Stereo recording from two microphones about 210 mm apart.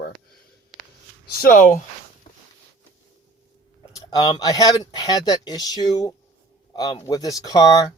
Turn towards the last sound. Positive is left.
turn(degrees=15)  # may be behind; listen again after turning